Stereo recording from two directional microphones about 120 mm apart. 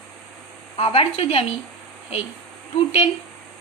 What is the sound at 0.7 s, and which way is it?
Speech, 50° left (ahead or behind).